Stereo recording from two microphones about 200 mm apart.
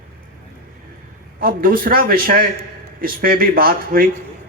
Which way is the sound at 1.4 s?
45° right (ahead or behind).